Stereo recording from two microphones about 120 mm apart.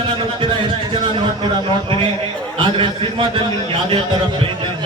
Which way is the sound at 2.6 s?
45° right (ahead or behind).